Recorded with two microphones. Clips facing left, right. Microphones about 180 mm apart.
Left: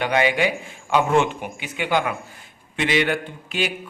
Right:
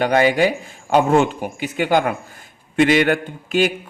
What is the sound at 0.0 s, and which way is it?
A man's voice, 40° right (ahead or behind).